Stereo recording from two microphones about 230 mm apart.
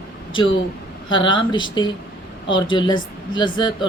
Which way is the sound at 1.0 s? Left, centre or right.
Left.